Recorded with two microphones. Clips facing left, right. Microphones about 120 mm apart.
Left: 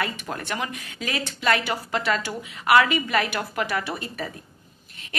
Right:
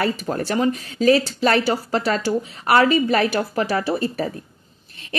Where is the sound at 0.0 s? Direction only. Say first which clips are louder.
Right 7 dB; 35° right (ahead or behind).